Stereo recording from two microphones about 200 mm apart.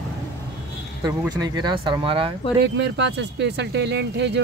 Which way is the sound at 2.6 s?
60° right (ahead or behind).